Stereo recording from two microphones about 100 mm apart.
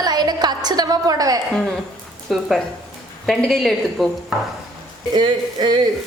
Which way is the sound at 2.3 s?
Centre (ahead or behind).